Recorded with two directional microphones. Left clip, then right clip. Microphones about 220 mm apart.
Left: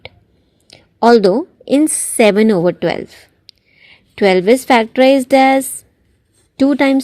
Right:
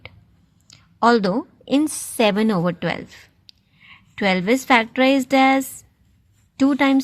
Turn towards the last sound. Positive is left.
turn(degrees=35)  # may be behind; listen again after turning